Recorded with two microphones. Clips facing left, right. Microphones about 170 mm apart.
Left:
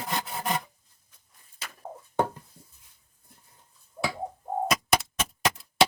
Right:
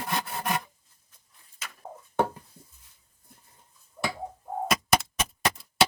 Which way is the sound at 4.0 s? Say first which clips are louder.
Left 1 dB; 25° left (ahead or behind).